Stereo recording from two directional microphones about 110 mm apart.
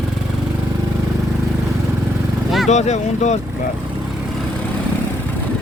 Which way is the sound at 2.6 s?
90° left.